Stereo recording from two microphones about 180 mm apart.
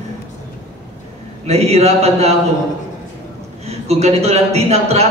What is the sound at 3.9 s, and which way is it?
A man's voice, 35° right (ahead or behind).